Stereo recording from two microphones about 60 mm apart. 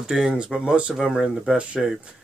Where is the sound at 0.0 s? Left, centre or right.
Centre.